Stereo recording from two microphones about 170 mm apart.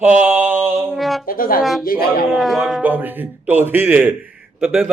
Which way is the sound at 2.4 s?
Centre (ahead or behind).